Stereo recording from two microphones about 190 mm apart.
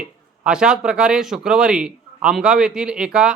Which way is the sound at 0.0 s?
5° right (ahead or behind).